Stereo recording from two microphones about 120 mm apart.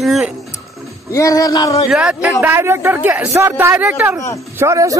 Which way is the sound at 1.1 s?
30° left (ahead or behind).